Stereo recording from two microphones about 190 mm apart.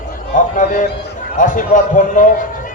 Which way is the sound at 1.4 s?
45° left (ahead or behind).